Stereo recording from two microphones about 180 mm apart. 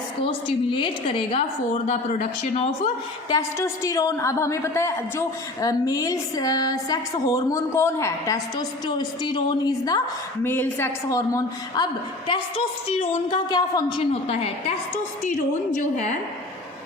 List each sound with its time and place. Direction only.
0.2 s a woman's voice: 30° left (ahead or behind)
3.2 s a woman's voice: 20° left (ahead or behind)
13.0 s a woman's voice: 25° left (ahead or behind)
14.1 s a woman's voice: 35° left (ahead or behind)
15.8 s a woman's voice: 40° left (ahead or behind)